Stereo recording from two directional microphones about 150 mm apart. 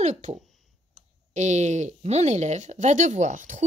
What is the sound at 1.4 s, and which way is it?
A woman's voice, 50° right (ahead or behind).